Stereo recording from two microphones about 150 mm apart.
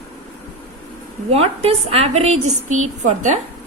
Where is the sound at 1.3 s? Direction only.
40° right (ahead or behind).